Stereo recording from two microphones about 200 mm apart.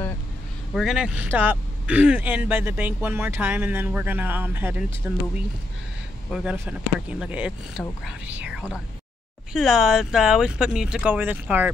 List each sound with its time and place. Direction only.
0.7 s speech: centre (ahead or behind)
6.3 s speech: 5° right (ahead or behind)